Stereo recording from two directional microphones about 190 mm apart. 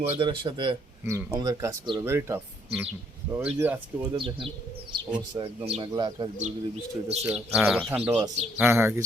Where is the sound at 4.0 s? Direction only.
25° right (ahead or behind).